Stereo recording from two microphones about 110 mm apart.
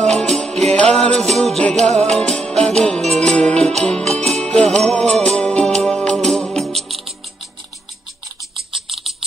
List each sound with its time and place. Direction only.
0.0 s music: 5° left (ahead or behind)
8.8 s typing: centre (ahead or behind)